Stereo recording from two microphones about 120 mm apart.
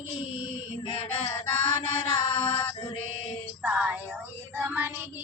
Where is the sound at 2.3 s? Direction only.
55° left (ahead or behind).